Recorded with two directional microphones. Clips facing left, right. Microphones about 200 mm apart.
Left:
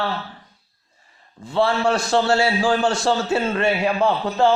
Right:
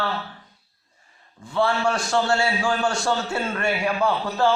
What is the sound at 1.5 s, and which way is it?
A man's voice, 25° left (ahead or behind).